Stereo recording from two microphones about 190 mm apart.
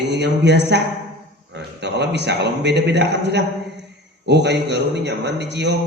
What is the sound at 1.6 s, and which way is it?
A man's voice, 60° right (ahead or behind).